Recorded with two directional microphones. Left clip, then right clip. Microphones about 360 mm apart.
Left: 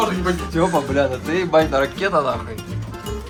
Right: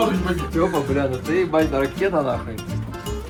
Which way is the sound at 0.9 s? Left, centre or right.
Centre.